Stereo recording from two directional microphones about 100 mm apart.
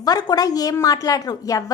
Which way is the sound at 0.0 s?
40° left (ahead or behind).